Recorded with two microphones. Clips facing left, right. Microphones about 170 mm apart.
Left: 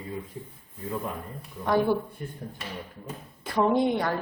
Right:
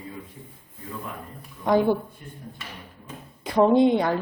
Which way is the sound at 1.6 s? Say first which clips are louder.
Right 4 dB; 15° right (ahead or behind).